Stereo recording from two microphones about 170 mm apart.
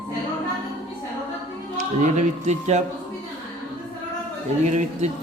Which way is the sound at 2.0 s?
45° right (ahead or behind).